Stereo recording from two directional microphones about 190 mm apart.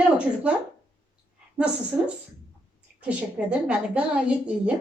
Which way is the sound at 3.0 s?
5° right (ahead or behind).